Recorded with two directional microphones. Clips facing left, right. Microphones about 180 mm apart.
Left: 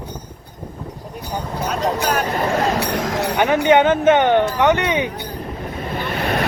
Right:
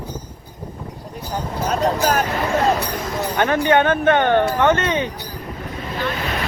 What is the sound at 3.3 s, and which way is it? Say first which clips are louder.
Speech: left 2 dB; 15° left (ahead or behind).